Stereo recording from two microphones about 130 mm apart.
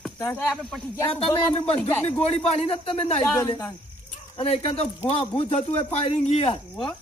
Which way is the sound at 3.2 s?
20° left (ahead or behind).